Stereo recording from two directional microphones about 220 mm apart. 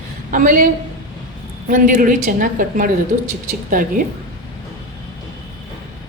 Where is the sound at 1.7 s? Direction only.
35° right (ahead or behind).